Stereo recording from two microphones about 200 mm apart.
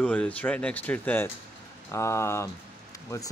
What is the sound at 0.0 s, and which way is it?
Speech, 5° left (ahead or behind).